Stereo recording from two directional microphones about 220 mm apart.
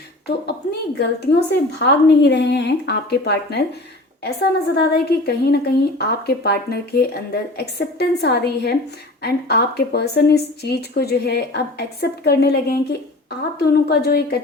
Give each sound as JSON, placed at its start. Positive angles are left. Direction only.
{"t": 0.9, "sound": "speech", "side_deg": 50}